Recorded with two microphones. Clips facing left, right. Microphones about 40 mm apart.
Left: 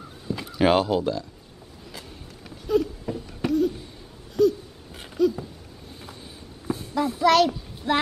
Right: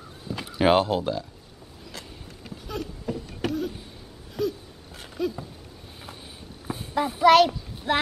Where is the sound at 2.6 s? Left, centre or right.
Centre.